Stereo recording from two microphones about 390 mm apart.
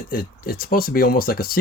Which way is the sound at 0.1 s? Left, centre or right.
Left.